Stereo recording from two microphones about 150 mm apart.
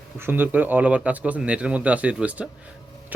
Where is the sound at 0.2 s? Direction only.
15° right (ahead or behind).